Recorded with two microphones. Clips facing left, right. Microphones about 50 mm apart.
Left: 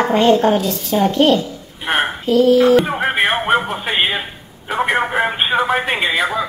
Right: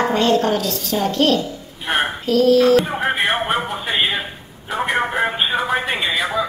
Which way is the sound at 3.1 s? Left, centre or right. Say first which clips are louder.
Left 4 dB; left.